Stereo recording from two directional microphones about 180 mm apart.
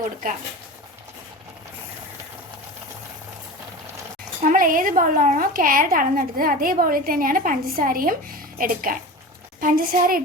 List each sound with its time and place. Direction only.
0.2 s a woman's voice: 50° right (ahead or behind)
4.4 s a woman's voice: 50° right (ahead or behind)